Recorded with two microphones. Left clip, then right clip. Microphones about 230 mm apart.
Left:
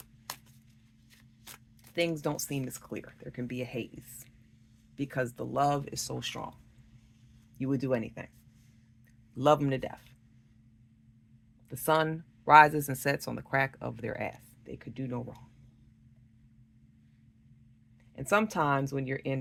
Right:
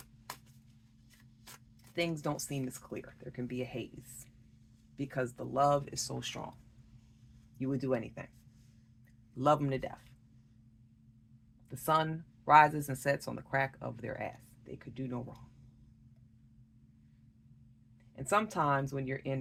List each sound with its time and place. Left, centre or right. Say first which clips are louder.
0.3 s a sound: left 4 dB; left
1.5 s speech: left 4 dB; left
7.6 s speech: left 3 dB; left
9.3 s speech: left 4 dB; left
11.7 s speech: left 3 dB; left
18.2 s speech: left 3 dB; left